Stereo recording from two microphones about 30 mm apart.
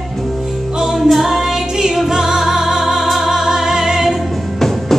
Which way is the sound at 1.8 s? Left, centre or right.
Centre.